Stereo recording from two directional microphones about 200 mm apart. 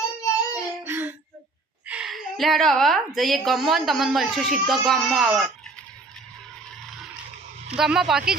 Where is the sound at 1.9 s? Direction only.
5° right (ahead or behind).